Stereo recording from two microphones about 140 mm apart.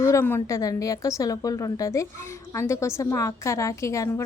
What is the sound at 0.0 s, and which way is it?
A woman's voice, 20° left (ahead or behind).